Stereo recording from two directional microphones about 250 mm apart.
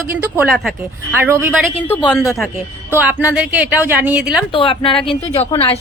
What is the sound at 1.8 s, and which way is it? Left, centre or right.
A woman's voice, centre.